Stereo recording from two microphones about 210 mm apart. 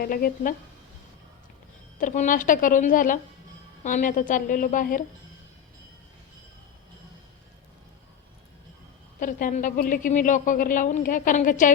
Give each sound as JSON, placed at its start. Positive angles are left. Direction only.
{"t": 0.0, "sound": "speech", "side_deg": 45}
{"t": 2.0, "sound": "a woman's voice", "side_deg": 35}
{"t": 9.2, "sound": "a woman's voice", "side_deg": 40}